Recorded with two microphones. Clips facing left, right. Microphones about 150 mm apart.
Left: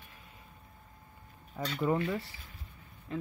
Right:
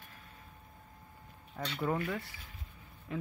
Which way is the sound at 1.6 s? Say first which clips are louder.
Left 3 dB; 5° left (ahead or behind).